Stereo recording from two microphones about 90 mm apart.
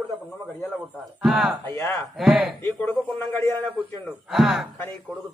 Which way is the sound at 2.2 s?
5° right (ahead or behind).